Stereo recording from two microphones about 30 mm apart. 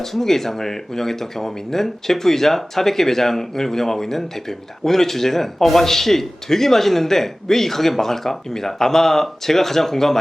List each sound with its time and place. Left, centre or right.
0.0 s speech: centre